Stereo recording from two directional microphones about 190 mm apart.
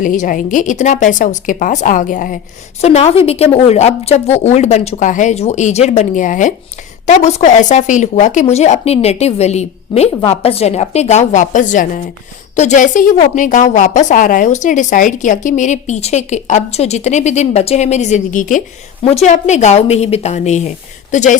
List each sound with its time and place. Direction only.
0.0 s a woman's voice: 45° left (ahead or behind)
2.8 s a woman's voice: 35° left (ahead or behind)